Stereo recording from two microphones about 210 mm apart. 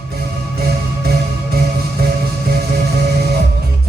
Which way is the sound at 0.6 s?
45° right (ahead or behind).